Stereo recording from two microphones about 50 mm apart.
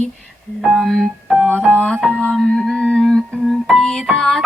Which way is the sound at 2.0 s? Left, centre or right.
Centre.